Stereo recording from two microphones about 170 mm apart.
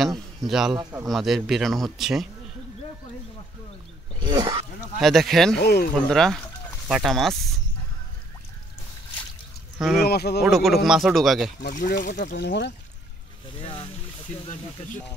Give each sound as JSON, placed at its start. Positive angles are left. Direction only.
{"t": 0.5, "sound": "speech", "side_deg": -5}
{"t": 4.2, "sound": "speech", "side_deg": -25}
{"t": 5.0, "sound": "speech", "side_deg": 0}
{"t": 5.6, "sound": "speech", "side_deg": 70}
{"t": 6.0, "sound": "speech", "side_deg": 0}
{"t": 9.8, "sound": "speech", "side_deg": 0}
{"t": 10.0, "sound": "speech", "side_deg": 70}
{"t": 10.4, "sound": "speech", "side_deg": 0}
{"t": 11.6, "sound": "speech", "side_deg": 50}
{"t": 12.3, "sound": "speech", "side_deg": 75}
{"t": 13.6, "sound": "speech", "side_deg": 35}